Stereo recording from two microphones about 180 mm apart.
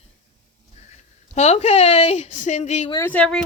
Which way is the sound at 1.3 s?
40° left (ahead or behind).